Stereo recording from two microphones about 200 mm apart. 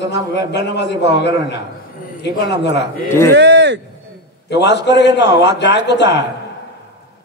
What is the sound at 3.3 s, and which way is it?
Speech, 60° right (ahead or behind).